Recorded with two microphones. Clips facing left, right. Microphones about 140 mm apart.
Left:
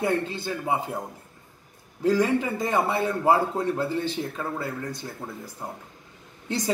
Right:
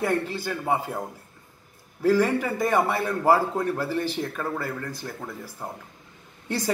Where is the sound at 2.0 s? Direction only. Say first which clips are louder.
Right 1 dB; 15° left (ahead or behind).